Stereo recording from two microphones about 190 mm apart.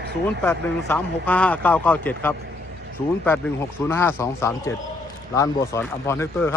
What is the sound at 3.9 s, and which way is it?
Speech, 10° left (ahead or behind).